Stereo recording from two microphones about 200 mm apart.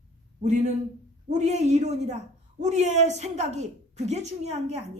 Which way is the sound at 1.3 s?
35° right (ahead or behind).